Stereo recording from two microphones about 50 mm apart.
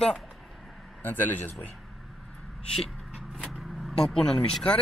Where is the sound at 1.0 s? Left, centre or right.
Left.